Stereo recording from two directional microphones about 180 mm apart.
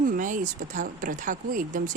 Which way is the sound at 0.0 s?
45° right (ahead or behind).